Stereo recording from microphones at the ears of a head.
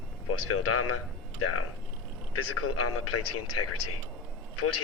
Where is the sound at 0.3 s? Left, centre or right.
Left.